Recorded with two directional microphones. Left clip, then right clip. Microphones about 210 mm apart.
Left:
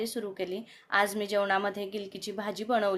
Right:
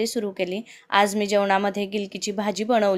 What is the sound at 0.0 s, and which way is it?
A woman's voice, 35° right (ahead or behind).